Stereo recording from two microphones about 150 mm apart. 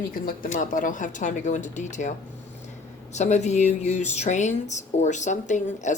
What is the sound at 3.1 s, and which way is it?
Speech, 50° left (ahead or behind).